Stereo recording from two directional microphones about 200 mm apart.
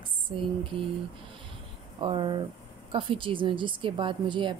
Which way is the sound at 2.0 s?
25° right (ahead or behind).